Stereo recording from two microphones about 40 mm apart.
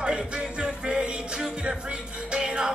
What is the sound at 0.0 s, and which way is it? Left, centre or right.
Music, right.